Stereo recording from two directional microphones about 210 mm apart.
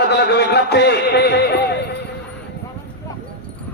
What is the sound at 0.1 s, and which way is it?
Music, 55° left (ahead or behind).